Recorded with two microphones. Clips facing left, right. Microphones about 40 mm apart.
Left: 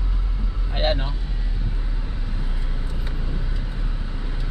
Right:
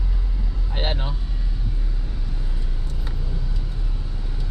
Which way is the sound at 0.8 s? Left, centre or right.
Centre.